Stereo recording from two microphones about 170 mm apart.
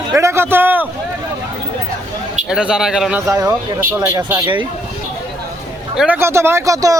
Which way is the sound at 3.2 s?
20° right (ahead or behind).